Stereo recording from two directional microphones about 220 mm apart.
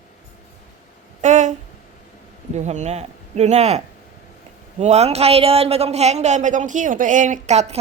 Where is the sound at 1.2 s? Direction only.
35° right (ahead or behind).